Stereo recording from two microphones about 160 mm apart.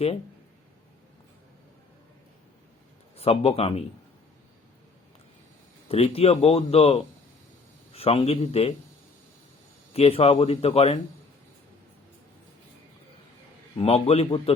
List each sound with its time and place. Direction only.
3.2 s speech: 40° left (ahead or behind)
5.9 s speech: 40° left (ahead or behind)
9.9 s speech: 40° left (ahead or behind)
13.7 s speech: 40° left (ahead or behind)